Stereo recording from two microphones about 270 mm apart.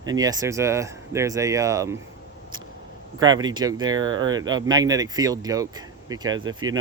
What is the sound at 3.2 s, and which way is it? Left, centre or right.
Speech, centre.